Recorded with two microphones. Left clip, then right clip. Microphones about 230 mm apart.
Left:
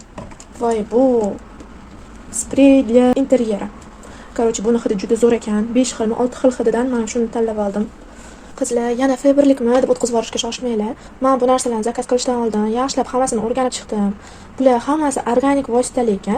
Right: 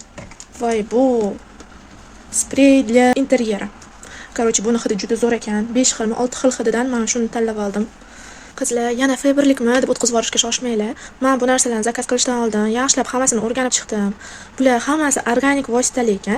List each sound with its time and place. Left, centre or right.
0.6 s speech: right
2.5 s speech: right
5.1 s speech: centre; by 16.3 s right